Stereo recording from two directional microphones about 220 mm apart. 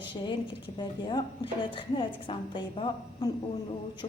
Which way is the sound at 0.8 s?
20° left (ahead or behind).